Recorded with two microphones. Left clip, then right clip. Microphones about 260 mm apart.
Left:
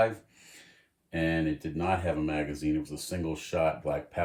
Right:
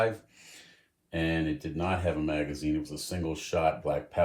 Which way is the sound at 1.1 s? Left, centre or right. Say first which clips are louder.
Left 1 dB; centre.